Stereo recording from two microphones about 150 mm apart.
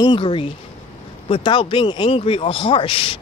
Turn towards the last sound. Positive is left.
turn(degrees=35)  # may be behind; listen again after turning